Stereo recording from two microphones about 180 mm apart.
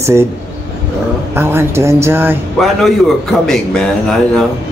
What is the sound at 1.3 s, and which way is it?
Speech, 15° right (ahead or behind).